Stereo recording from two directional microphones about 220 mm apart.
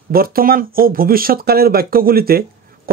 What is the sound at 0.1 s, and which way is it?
Speech, 40° right (ahead or behind).